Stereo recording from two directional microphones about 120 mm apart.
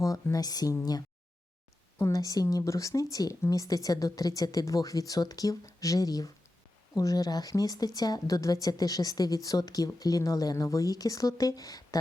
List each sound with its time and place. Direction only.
0.0 s speech: 30° left (ahead or behind)
2.0 s a woman's voice: 25° left (ahead or behind)